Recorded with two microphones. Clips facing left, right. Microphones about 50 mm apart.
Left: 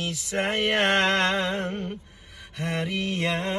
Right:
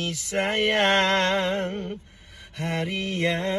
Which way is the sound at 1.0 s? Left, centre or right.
Left.